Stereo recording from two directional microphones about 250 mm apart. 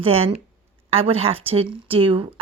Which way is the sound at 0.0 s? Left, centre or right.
Right.